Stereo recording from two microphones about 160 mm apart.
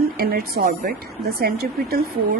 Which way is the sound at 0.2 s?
70° right (ahead or behind).